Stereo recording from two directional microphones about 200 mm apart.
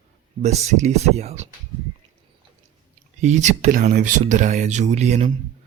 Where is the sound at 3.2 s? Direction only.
35° right (ahead or behind).